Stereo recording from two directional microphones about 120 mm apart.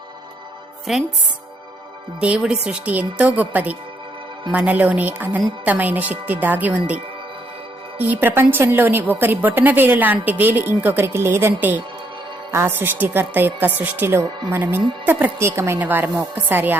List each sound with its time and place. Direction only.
0.9 s a woman's voice: 5° right (ahead or behind)
2.2 s a woman's voice: 10° right (ahead or behind)